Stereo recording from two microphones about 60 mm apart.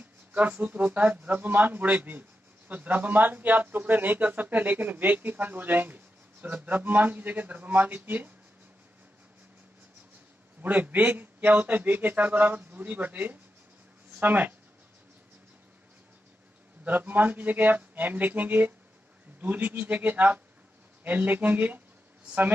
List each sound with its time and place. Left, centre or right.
0.3 s speech: right
10.6 s speech: right
16.8 s speech: right